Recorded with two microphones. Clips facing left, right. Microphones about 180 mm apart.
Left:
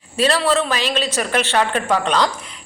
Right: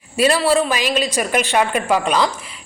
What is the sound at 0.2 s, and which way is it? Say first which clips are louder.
A woman's voice: right 2 dB; 10° right (ahead or behind).